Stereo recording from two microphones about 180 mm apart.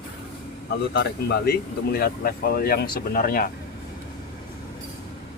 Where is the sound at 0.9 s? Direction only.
60° left (ahead or behind).